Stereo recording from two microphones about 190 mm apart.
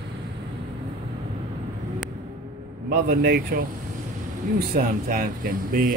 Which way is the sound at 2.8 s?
55° right (ahead or behind).